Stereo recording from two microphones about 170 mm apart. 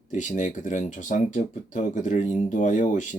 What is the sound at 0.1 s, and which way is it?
Speech, 45° left (ahead or behind).